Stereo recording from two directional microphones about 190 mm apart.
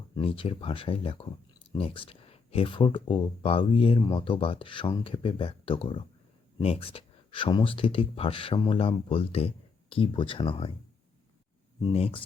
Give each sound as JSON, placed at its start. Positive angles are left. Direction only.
{"t": 0.2, "sound": "speech", "side_deg": 30}
{"t": 11.8, "sound": "speech", "side_deg": 30}